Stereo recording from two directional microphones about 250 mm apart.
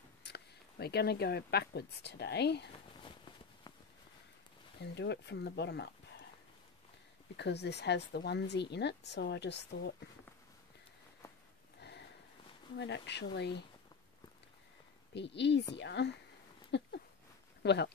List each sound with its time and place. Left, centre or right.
0.2 s speech: left
4.8 s speech: left
7.3 s speech: left
12.7 s speech: left
15.1 s speech: left
16.7 s a sound: left
17.6 s speech: left